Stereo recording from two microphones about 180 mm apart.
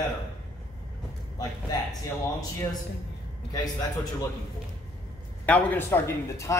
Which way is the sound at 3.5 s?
20° left (ahead or behind).